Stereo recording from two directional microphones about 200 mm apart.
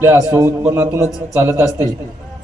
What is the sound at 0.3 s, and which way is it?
A man's voice, 15° right (ahead or behind).